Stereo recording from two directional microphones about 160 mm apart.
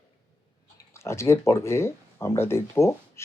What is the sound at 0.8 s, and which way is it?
Speech, 15° left (ahead or behind).